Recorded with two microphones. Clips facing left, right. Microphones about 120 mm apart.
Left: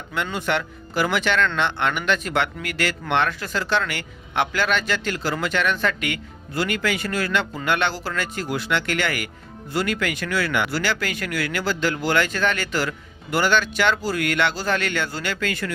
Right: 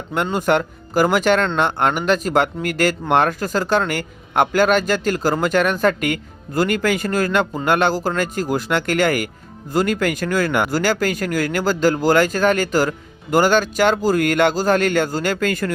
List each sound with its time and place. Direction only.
0.1 s speech: 45° right (ahead or behind)